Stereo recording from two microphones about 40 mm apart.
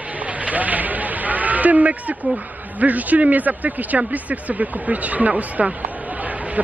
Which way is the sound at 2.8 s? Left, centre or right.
Right.